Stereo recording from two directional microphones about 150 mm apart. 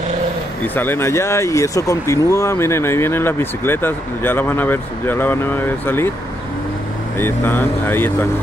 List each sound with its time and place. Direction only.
0.7 s speech: 15° left (ahead or behind)
7.2 s speech: 15° left (ahead or behind)